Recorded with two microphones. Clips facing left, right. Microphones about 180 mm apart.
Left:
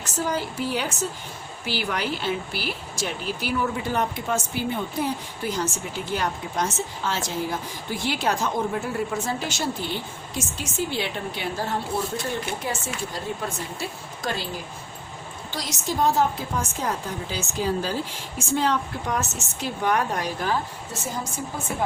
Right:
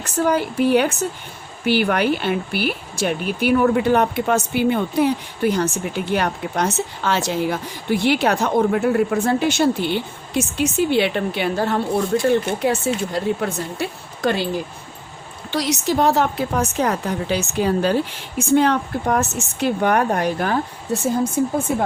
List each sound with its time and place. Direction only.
0.0 s a woman's voice: 60° right (ahead or behind)
15.4 s speech: 70° right (ahead or behind)